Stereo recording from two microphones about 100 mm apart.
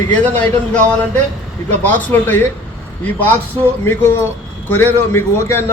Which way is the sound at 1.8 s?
20° left (ahead or behind).